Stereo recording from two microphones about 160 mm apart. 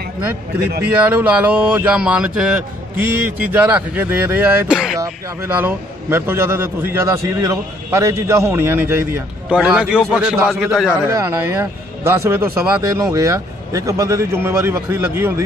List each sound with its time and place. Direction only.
0.6 s speech: 80° right
1.1 s a man's voice: 10° right (ahead or behind)
11.1 s a man's voice: 15° right (ahead or behind)